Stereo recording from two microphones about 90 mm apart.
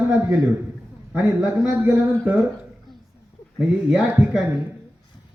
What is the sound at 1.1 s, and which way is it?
Speech, 15° right (ahead or behind).